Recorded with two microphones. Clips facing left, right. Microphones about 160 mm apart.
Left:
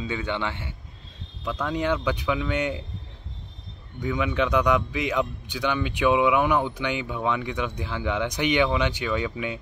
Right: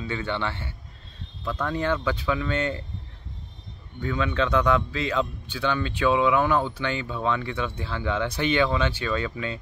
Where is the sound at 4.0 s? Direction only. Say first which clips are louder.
Left 1 dB; 15° left (ahead or behind).